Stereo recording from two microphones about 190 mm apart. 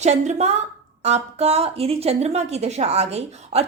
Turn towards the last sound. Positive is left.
turn(degrees=-35)  # may be behind; listen again after turning